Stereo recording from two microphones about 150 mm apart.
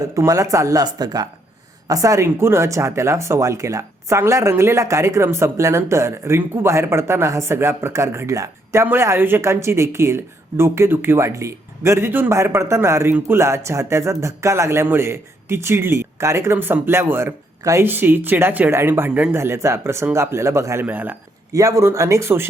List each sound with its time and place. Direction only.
0.0 s speech: 20° right (ahead or behind)